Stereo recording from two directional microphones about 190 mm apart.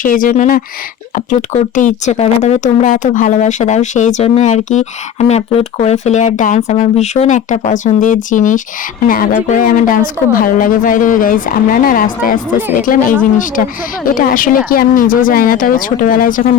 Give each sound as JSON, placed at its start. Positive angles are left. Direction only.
{"t": 0.0, "sound": "speech", "side_deg": 45}